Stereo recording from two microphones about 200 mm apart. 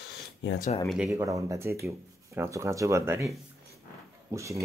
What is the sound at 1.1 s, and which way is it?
Speech, 15° right (ahead or behind).